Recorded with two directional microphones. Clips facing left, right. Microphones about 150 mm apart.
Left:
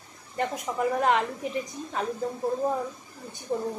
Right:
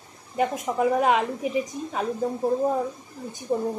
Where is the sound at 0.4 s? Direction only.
15° right (ahead or behind).